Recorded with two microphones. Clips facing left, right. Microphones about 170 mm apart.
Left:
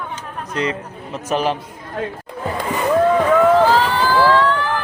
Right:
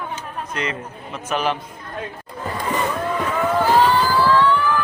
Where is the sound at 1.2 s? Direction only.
35° left (ahead or behind).